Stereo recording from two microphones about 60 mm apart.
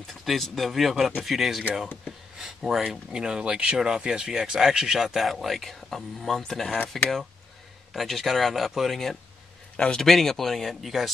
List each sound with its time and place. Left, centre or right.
0.0 s speech: centre
7.9 s speech: centre
10.0 s speech: centre